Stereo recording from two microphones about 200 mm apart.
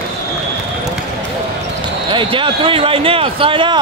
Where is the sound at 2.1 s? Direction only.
25° right (ahead or behind).